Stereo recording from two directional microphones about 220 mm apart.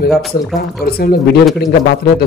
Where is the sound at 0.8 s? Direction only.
45° left (ahead or behind).